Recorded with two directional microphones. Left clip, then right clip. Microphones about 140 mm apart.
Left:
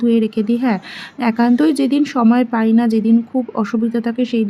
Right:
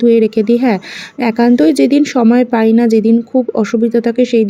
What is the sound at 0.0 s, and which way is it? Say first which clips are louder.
Speech: right 7 dB; 30° right (ahead or behind).